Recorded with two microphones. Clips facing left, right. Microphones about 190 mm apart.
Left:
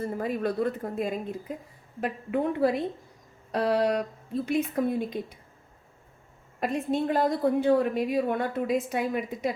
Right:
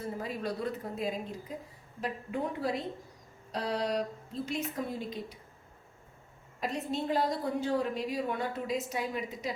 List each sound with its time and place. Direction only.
0.0 s a woman's voice: 55° left (ahead or behind)
6.6 s a woman's voice: 55° left (ahead or behind)